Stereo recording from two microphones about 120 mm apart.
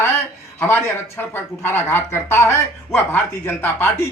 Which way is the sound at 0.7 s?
20° left (ahead or behind).